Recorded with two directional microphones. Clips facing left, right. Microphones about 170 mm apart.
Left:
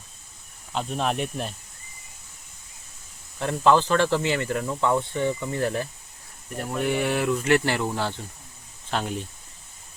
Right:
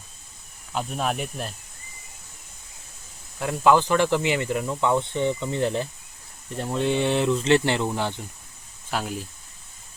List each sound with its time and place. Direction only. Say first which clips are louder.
0.7 s speech: even; 5° right (ahead or behind)
3.3 s speech: right 1 dB; 10° right (ahead or behind)
8.9 s speech: left 1 dB; 5° right (ahead or behind)